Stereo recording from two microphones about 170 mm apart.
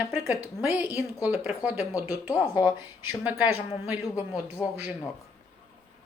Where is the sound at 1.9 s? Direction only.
20° left (ahead or behind).